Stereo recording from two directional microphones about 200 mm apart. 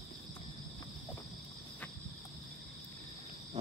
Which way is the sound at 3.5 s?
35° right (ahead or behind).